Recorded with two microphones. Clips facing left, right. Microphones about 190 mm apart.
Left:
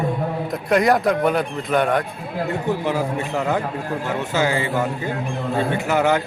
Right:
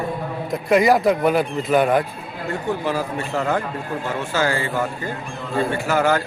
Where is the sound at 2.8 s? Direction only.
15° left (ahead or behind).